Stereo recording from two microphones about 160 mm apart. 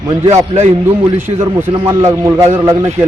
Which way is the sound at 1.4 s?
15° right (ahead or behind).